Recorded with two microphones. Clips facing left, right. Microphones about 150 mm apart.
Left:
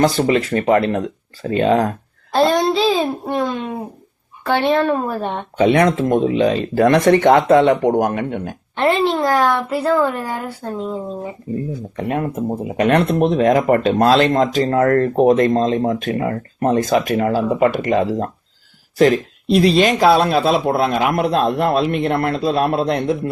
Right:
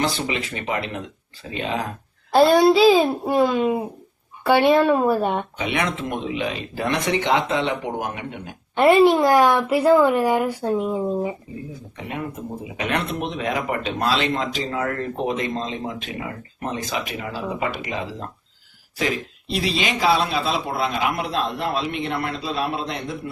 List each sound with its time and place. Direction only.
0.3 s speech: 45° left (ahead or behind)
2.3 s a child's voice: 10° right (ahead or behind)
5.5 s speech: 50° left (ahead or behind)
8.7 s speech: 10° right (ahead or behind)
11.9 s speech: 50° left (ahead or behind)